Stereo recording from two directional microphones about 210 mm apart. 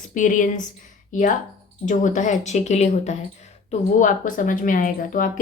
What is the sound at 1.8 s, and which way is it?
Speech, 35° left (ahead or behind).